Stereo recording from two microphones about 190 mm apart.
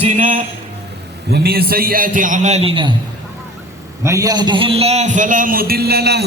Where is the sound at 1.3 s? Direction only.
55° right (ahead or behind); by 2.9 s 30° right (ahead or behind).